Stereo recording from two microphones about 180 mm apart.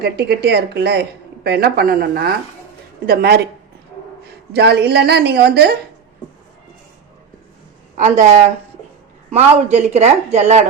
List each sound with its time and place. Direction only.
0.0 s a woman's voice: 65° right (ahead or behind)
4.5 s a woman's voice: 65° right (ahead or behind)
7.9 s a woman's voice: 45° right (ahead or behind)